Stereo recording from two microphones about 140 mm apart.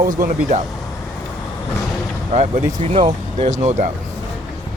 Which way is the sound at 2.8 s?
45° right (ahead or behind).